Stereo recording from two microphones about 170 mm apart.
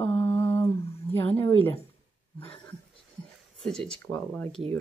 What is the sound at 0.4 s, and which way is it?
Humming, 15° left (ahead or behind).